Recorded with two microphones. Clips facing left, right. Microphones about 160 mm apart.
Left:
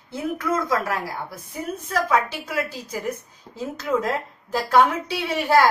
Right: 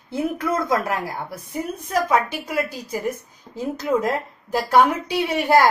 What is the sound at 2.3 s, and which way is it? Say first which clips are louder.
Speech: right 2 dB; 15° right (ahead or behind).